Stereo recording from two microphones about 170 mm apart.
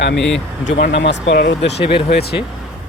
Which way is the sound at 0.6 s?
80° left.